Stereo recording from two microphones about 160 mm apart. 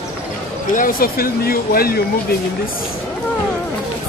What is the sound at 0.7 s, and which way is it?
Speech, 65° left (ahead or behind).